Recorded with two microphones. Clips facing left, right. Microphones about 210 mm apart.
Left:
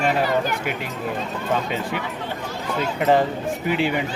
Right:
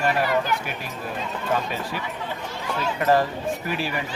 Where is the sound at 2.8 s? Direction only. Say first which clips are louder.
Left 2 dB; 20° left (ahead or behind).